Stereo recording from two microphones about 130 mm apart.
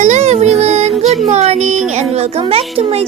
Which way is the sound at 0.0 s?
60° right (ahead or behind).